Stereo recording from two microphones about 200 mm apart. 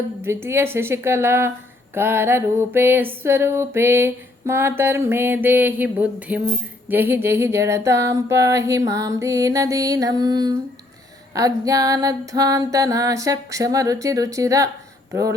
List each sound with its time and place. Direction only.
0.2 s a woman's voice: 10° right (ahead or behind)